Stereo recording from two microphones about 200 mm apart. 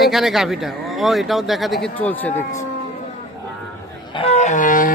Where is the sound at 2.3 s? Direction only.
35° left (ahead or behind).